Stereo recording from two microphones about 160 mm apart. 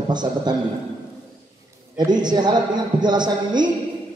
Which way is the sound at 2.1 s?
25° right (ahead or behind).